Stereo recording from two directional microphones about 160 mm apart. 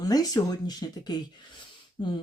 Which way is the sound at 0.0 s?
25° left (ahead or behind).